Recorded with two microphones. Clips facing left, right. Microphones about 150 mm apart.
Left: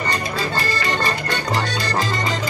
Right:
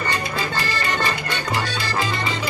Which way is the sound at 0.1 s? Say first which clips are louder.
Left 2 dB; 35° left (ahead or behind).